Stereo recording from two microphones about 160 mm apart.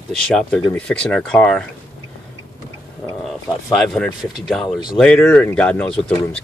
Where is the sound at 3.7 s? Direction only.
5° left (ahead or behind).